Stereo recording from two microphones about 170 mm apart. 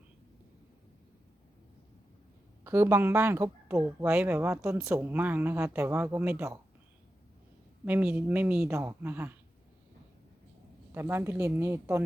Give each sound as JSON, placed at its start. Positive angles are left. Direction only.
{"t": 2.6, "sound": "a woman's voice", "side_deg": -15}
{"t": 7.9, "sound": "a woman's voice", "side_deg": -10}
{"t": 10.9, "sound": "a woman's voice", "side_deg": -15}